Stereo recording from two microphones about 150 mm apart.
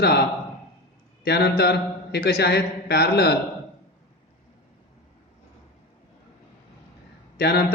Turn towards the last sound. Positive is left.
turn(degrees=90)